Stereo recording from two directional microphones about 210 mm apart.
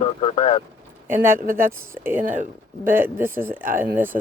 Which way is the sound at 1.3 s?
45° right (ahead or behind).